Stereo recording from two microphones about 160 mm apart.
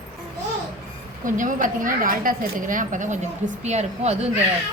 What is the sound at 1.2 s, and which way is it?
A woman's voice, 55° right (ahead or behind).